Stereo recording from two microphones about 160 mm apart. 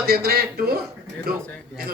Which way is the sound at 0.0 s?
80° right.